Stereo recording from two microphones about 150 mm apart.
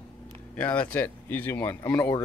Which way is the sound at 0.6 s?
10° left (ahead or behind).